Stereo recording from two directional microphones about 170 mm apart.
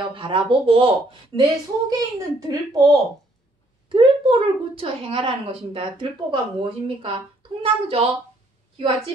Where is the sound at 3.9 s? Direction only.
30° right (ahead or behind).